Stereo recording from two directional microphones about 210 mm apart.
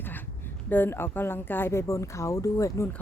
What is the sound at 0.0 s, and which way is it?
Speech, 10° left (ahead or behind).